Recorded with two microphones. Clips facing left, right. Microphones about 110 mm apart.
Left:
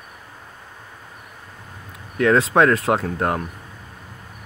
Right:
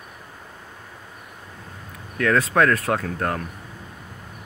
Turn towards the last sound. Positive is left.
turn(degrees=25)  # may be behind; listen again after turning